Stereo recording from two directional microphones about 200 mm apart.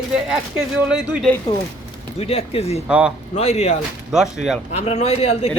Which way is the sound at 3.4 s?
30° left (ahead or behind).